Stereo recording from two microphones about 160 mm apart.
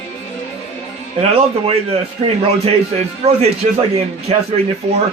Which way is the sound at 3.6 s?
45° right (ahead or behind).